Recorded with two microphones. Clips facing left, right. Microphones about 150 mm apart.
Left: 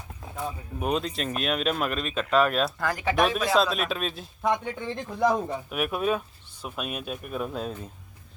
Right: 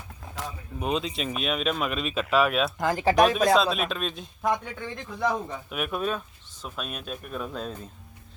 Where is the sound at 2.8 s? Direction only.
20° right (ahead or behind).